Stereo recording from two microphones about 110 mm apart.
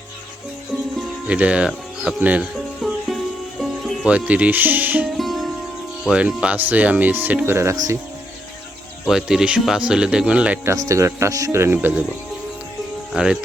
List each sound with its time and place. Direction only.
1.3 s speech: 10° right (ahead or behind)
2.8 s music: centre (ahead or behind)
4.0 s speech: 10° right (ahead or behind)
5.0 s music: centre (ahead or behind)
6.1 s speech: 10° right (ahead or behind)
9.0 s speech: 5° right (ahead or behind)
10.7 s speech: 30° right (ahead or behind)
13.1 s speech: 10° right (ahead or behind)